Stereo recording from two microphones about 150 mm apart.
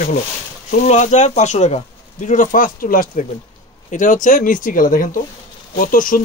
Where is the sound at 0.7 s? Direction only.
50° left (ahead or behind); by 3.2 s 70° left (ahead or behind).